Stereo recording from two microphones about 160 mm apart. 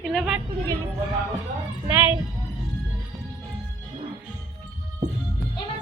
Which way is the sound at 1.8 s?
15° right (ahead or behind).